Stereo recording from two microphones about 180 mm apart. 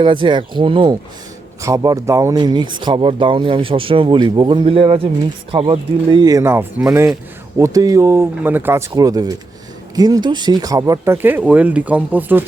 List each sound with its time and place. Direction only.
0.0 s speech: 25° right (ahead or behind); by 12.5 s 10° right (ahead or behind)